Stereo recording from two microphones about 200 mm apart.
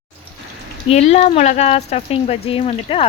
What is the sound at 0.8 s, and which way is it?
Speech, 30° left (ahead or behind).